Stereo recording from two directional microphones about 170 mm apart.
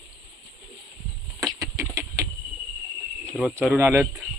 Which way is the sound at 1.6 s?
20° right (ahead or behind).